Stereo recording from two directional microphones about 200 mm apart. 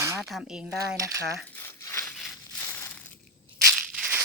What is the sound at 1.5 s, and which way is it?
Crumpling, 15° left (ahead or behind).